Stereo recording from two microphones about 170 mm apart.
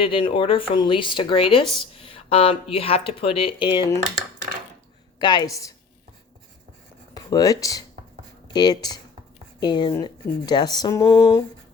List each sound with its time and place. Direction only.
0.0 s speech: 30° left (ahead or behind)
5.2 s speech: 25° left (ahead or behind)
7.1 s speech: 20° left (ahead or behind)